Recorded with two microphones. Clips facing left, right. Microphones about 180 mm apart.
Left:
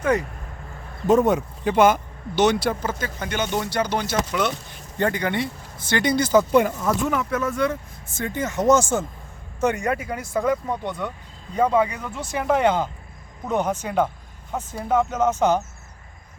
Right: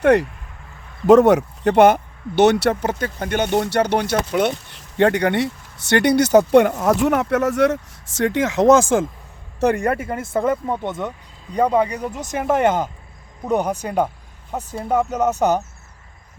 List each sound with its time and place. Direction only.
0.0 s speech: 70° right (ahead or behind)
1.0 s speech: 85° right
9.6 s speech: 55° right (ahead or behind)
11.5 s speech: 40° right (ahead or behind)